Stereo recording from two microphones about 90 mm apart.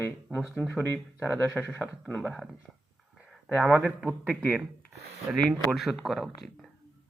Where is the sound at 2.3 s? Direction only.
Centre (ahead or behind).